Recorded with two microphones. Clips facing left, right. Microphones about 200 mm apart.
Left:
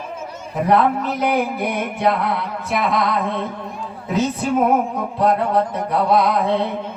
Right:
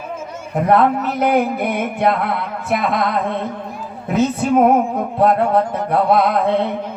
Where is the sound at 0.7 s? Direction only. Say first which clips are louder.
Right 2 dB; 55° right (ahead or behind).